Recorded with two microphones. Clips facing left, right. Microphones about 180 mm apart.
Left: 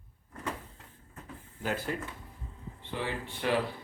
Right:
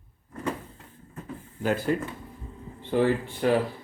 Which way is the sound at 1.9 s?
50° right (ahead or behind).